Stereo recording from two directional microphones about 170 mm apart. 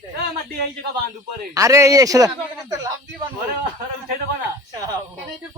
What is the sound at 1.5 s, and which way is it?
Speech, 20° right (ahead or behind).